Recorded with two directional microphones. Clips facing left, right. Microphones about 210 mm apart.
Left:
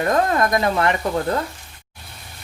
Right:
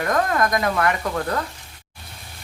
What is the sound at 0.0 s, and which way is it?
Speech, 25° left (ahead or behind).